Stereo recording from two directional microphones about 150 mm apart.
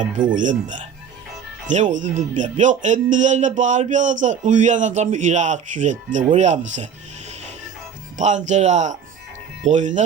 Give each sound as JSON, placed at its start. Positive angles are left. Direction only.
{"t": 0.3, "sound": "speech", "side_deg": -55}
{"t": 8.2, "sound": "speech", "side_deg": -50}